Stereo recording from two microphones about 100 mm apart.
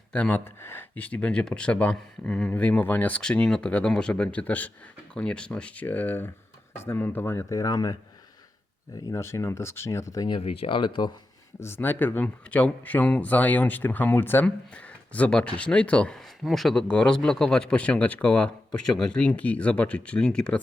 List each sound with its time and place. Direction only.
0.1 s speech: 15° left (ahead or behind); by 7.9 s 40° left (ahead or behind)
9.1 s speech: 25° left (ahead or behind)
10.4 s speech: 75° left (ahead or behind); by 11.1 s 50° left (ahead or behind)
11.6 s speech: 20° left (ahead or behind)
16.4 s speech: centre (ahead or behind)